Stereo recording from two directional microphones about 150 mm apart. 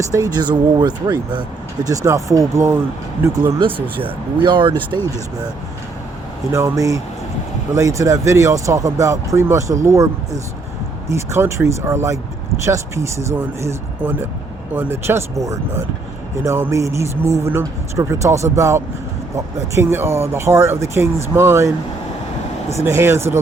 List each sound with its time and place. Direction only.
0.0 s speech: 20° right (ahead or behind)
3.2 s speech: 30° right (ahead or behind)
6.5 s speech: 20° right (ahead or behind)
22.7 s speech: 15° right (ahead or behind)